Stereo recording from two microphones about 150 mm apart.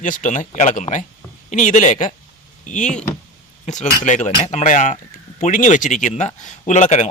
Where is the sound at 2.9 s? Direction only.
5° left (ahead or behind).